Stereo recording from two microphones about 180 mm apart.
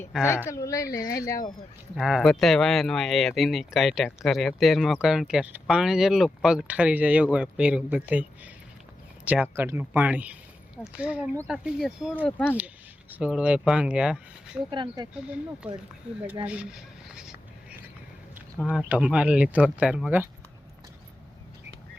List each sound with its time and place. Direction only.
0.3 s a woman's voice: 15° left (ahead or behind)
2.0 s speech: centre (ahead or behind)
12.1 s a woman's voice: 10° left (ahead or behind)
12.5 s speech: 10° right (ahead or behind)
14.7 s speech: 25° right (ahead or behind)
15.1 s speech: 5° right (ahead or behind)
16.2 s a sound: 5° right (ahead or behind)
18.6 s speech: 5° right (ahead or behind)